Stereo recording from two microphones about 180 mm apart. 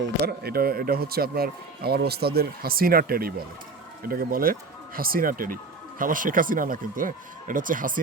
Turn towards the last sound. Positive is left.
turn(degrees=-50)  # may be behind; listen again after turning